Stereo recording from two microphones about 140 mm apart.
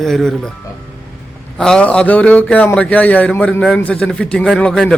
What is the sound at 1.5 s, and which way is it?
A man's voice, 5° left (ahead or behind).